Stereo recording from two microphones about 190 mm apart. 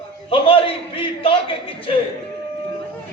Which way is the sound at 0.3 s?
30° left (ahead or behind).